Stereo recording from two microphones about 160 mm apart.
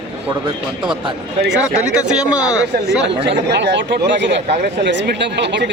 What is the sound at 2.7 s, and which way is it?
Speech, 90° right.